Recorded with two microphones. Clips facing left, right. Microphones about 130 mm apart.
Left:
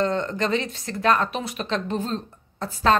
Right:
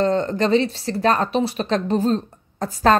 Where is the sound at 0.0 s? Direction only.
35° right (ahead or behind).